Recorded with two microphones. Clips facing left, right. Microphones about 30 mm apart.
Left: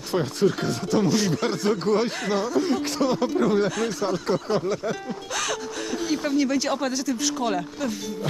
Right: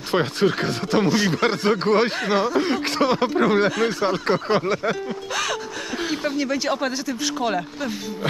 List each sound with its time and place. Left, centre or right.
0.1 s speech: right
5.3 s music: centre
6.3 s speech: centre